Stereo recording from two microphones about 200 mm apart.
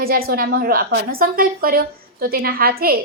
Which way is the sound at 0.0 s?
50° right (ahead or behind).